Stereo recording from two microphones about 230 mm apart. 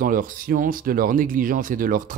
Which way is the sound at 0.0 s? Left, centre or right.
Right.